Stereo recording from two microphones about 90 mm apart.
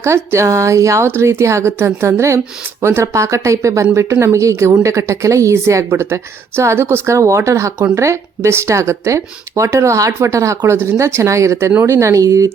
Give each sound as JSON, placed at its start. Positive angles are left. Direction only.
{"t": 0.0, "sound": "speech", "side_deg": -30}